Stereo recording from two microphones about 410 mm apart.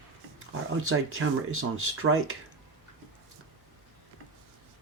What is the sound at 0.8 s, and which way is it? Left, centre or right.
Speech, right.